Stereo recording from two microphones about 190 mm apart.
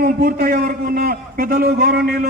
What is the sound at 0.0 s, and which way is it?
A man's voice, 55° right (ahead or behind).